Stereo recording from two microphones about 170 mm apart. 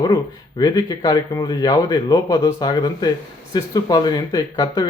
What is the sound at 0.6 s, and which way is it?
Speech, 20° left (ahead or behind).